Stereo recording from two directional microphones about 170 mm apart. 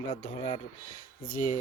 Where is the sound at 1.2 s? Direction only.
55° left (ahead or behind).